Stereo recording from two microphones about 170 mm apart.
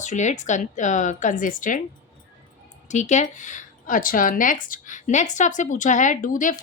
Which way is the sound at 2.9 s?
45° left (ahead or behind).